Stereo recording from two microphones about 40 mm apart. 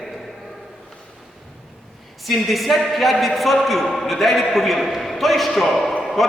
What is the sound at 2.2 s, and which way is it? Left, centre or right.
A man's voice, centre.